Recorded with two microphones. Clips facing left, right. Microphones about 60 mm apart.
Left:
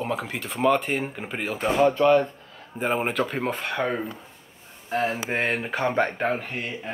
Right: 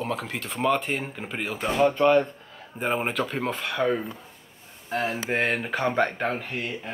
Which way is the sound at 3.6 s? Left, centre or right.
Centre.